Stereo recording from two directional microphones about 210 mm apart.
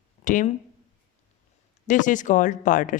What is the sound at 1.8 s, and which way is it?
Speech, 40° left (ahead or behind).